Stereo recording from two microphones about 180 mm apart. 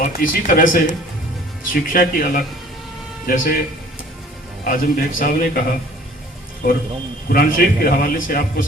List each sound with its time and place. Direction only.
0.0 s a man's voice: 50° left (ahead or behind)
4.6 s a man's voice: 50° left (ahead or behind)
6.6 s a man's voice: 55° left (ahead or behind)